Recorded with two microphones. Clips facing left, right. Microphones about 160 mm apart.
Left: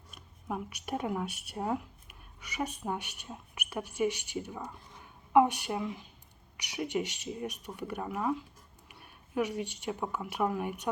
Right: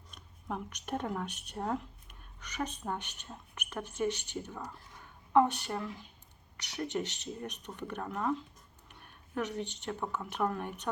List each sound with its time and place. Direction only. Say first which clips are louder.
0.1 s speech: left 2 dB; 5° left (ahead or behind)
4.6 s speech: left 1 dB; 20° left (ahead or behind)